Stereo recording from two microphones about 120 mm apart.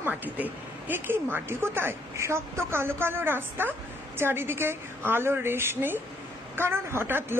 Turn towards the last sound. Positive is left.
turn(degrees=-20)  # may be behind; listen again after turning